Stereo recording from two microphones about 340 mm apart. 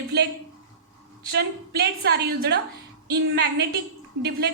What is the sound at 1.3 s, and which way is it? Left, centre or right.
A woman's voice, right.